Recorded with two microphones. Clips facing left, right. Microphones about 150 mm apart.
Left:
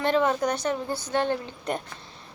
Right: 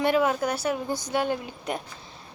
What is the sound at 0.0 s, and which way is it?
A woman's voice, 10° right (ahead or behind).